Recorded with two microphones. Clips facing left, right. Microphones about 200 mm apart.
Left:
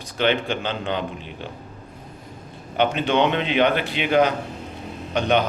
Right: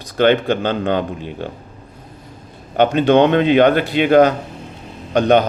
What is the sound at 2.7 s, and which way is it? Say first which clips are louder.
Speech: right 8 dB; 45° right (ahead or behind).